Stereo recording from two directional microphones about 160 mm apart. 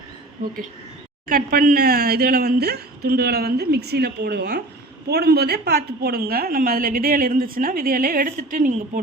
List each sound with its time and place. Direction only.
1.3 s a woman's voice: 65° right (ahead or behind)